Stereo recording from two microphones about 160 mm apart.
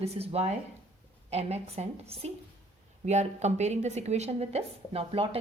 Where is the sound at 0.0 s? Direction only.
40° right (ahead or behind).